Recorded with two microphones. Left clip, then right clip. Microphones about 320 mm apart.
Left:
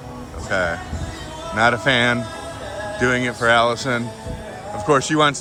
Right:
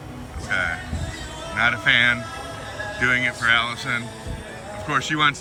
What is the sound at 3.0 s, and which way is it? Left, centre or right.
Speech, centre.